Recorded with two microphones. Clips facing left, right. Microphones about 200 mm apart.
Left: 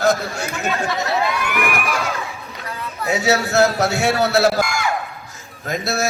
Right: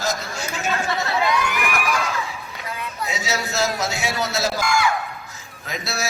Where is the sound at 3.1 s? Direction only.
60° left (ahead or behind).